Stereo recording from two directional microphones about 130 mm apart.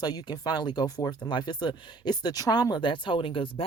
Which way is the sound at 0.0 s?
30° left (ahead or behind).